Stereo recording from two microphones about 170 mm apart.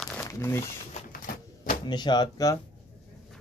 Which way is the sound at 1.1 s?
55° left (ahead or behind).